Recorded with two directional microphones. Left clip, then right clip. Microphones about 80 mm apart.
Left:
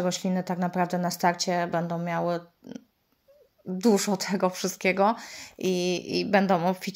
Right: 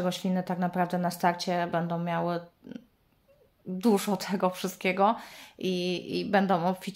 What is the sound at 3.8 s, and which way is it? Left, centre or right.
A woman's voice, left.